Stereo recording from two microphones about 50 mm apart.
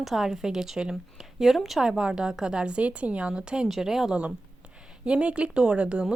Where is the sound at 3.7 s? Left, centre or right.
Centre.